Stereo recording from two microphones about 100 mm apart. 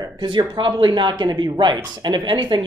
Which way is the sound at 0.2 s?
50° right (ahead or behind).